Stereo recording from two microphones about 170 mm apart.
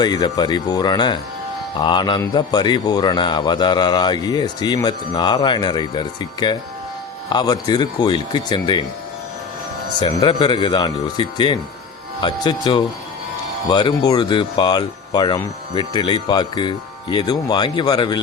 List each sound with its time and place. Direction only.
0.0 s a man's voice: 25° left (ahead or behind)
10.2 s a man's voice: 25° left (ahead or behind)